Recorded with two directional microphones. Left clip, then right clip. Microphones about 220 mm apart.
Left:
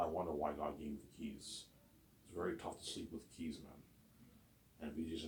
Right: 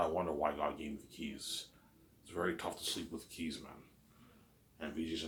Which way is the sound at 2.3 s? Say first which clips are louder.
Right 6 dB; 20° right (ahead or behind).